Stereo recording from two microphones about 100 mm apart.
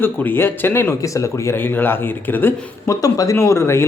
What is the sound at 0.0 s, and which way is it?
Speech, 20° left (ahead or behind).